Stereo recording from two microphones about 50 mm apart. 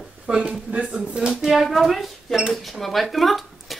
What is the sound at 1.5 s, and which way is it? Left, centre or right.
Speech, centre.